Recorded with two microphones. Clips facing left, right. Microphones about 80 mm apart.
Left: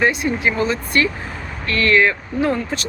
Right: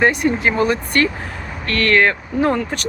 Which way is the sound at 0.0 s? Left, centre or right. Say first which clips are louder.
Right 2 dB; right.